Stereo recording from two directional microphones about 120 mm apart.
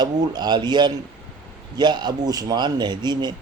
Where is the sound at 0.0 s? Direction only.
35° right (ahead or behind).